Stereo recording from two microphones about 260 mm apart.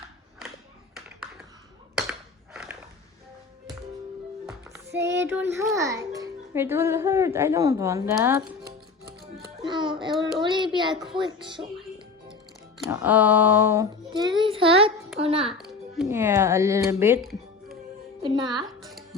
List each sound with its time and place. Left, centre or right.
2.0 s a sound: centre
4.9 s child singing: right
5.2 s a child's voice: centre
12.9 s a child's voice: centre; by 15.5 s right
15.5 s music: centre
16.0 s speech: centre
18.2 s speech: centre